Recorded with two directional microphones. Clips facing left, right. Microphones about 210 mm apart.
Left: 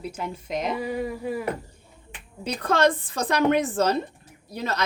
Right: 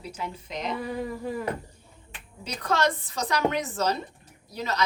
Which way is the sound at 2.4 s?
55° left (ahead or behind).